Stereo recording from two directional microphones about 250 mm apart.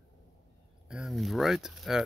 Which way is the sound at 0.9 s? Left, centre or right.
Centre.